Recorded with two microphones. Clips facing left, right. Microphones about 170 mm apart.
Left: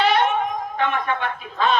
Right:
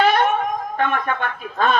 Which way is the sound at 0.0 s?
50° right (ahead or behind).